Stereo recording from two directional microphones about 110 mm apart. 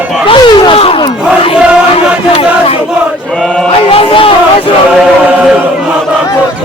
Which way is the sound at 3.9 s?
55° left (ahead or behind).